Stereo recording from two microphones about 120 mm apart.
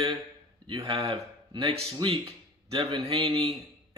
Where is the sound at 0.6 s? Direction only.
50° right (ahead or behind).